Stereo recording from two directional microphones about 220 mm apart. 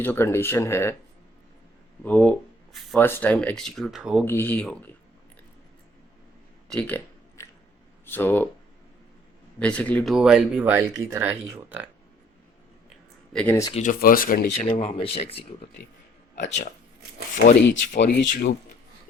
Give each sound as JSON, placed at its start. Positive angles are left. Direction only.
{"t": 0.0, "sound": "speech", "side_deg": 10}
{"t": 2.0, "sound": "speech", "side_deg": 5}
{"t": 4.3, "sound": "speech", "side_deg": 10}
{"t": 6.7, "sound": "a sound", "side_deg": 5}
{"t": 8.0, "sound": "speech", "side_deg": 10}
{"t": 9.6, "sound": "speech", "side_deg": 5}
{"t": 13.3, "sound": "speech", "side_deg": 5}
{"t": 13.7, "sound": "speech", "side_deg": 35}
{"t": 14.7, "sound": "speech", "side_deg": 25}
{"t": 17.3, "sound": "speech", "side_deg": 35}
{"t": 18.0, "sound": "speech", "side_deg": 55}